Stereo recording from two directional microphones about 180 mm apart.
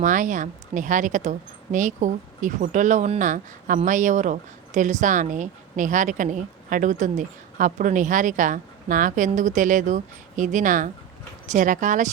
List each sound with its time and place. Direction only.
0.0 s speech: 45° right (ahead or behind)